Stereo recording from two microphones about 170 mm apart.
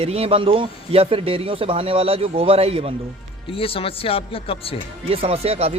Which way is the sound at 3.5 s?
35° left (ahead or behind).